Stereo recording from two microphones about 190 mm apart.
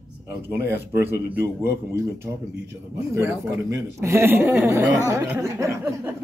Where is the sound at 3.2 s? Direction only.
15° right (ahead or behind).